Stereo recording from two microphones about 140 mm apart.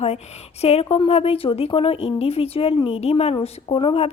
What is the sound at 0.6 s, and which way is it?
A woman's voice, 50° left (ahead or behind).